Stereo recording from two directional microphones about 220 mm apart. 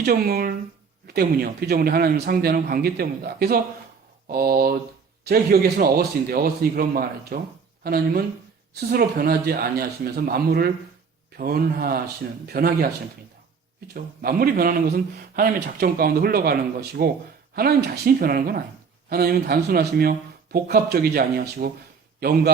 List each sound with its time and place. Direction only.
0.0 s speech: 45° right (ahead or behind)